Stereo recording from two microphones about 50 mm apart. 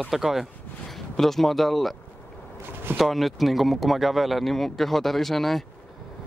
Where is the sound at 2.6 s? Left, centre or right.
Right.